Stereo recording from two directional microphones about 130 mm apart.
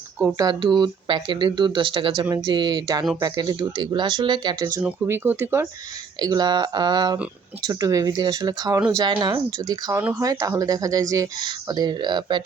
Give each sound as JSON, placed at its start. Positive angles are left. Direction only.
{"t": 0.3, "sound": "speech", "side_deg": -30}
{"t": 4.8, "sound": "speech", "side_deg": -15}
{"t": 6.1, "sound": "speech", "side_deg": -30}